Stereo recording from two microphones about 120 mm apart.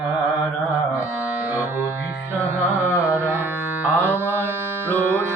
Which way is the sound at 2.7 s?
15° right (ahead or behind).